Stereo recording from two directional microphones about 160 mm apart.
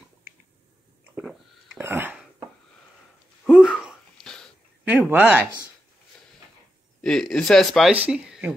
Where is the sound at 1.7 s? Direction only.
15° right (ahead or behind).